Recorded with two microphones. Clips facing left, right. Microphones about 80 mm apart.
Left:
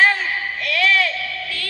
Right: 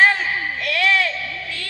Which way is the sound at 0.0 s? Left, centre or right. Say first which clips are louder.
Right 1 dB; right.